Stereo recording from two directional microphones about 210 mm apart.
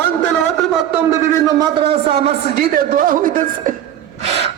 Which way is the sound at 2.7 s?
40° right (ahead or behind).